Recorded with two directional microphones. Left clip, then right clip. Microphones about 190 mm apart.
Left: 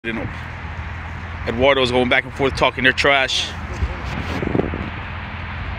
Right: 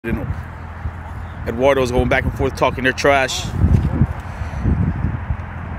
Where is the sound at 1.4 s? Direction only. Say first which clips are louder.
Even; 15° right (ahead or behind).